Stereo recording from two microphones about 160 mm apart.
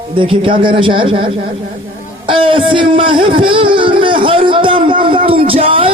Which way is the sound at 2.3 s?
30° right (ahead or behind).